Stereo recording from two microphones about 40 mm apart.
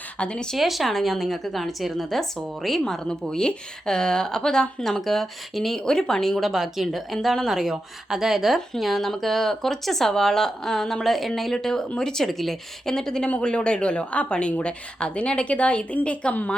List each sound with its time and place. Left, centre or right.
0.2 s speech: left
0.5 s a woman's voice: centre
4.9 s a woman's voice: centre
6.4 s a woman's voice: centre
12.2 s a woman's voice: centre; by 16.4 s left